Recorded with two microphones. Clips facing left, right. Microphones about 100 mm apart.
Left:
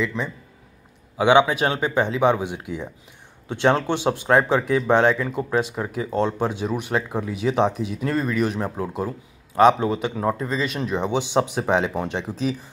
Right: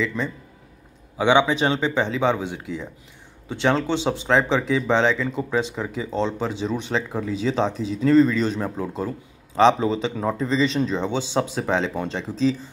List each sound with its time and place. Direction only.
0.0 s speech: 15° left (ahead or behind)